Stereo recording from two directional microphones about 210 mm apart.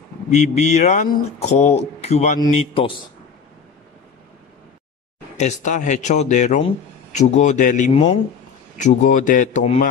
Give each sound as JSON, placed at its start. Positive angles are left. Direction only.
{"t": 0.3, "sound": "a man's voice", "side_deg": 35}
{"t": 5.4, "sound": "speech", "side_deg": 35}